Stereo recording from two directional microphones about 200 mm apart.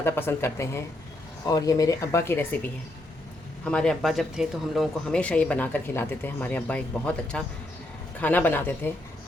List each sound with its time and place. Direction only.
0.0 s speech: 10° left (ahead or behind)
3.6 s speech: 5° left (ahead or behind)